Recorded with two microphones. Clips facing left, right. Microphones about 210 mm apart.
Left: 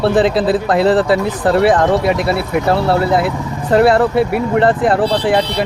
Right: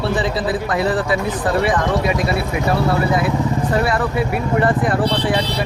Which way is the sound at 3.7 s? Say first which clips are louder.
Left 11 dB; 65° left (ahead or behind).